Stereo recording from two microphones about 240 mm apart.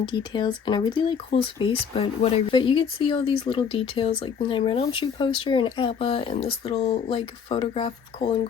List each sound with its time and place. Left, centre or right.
0.0 s speech: centre